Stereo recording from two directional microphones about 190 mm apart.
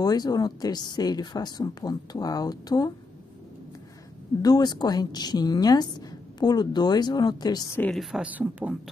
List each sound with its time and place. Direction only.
0.0 s a woman's voice: 20° left (ahead or behind)
4.4 s a woman's voice: 20° left (ahead or behind)
7.9 s speech: centre (ahead or behind)